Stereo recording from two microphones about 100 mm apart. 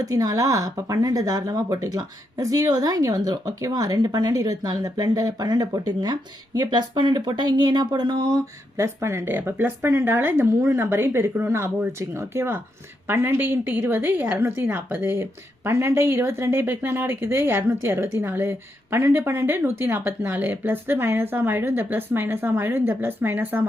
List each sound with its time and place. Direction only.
0.0 s speech: 35° right (ahead or behind)
8.8 s a woman's voice: 30° right (ahead or behind)